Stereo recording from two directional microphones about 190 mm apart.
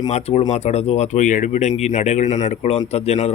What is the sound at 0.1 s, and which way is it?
Speech, 35° left (ahead or behind).